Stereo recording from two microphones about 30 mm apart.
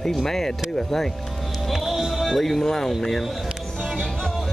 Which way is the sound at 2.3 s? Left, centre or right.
Centre.